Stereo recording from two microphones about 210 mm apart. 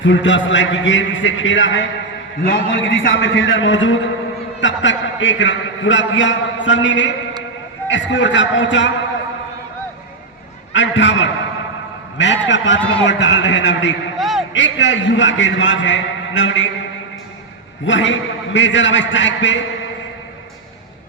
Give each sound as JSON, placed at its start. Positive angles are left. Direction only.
{"t": 0.0, "sound": "a man's voice", "side_deg": 60}
{"t": 10.7, "sound": "a man's voice", "side_deg": 60}
{"t": 14.2, "sound": "a sound", "side_deg": 0}
{"t": 14.5, "sound": "a man's voice", "side_deg": 60}
{"t": 17.8, "sound": "a man's voice", "side_deg": 60}